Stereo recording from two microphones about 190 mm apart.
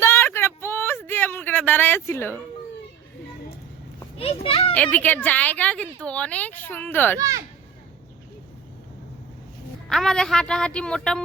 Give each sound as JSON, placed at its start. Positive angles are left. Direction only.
{"t": 0.0, "sound": "a sound", "side_deg": 15}
{"t": 4.2, "sound": "a child's voice", "side_deg": 30}
{"t": 4.7, "sound": "speech", "side_deg": 10}
{"t": 7.2, "sound": "a child's voice", "side_deg": -15}
{"t": 9.9, "sound": "a woman's voice", "side_deg": 0}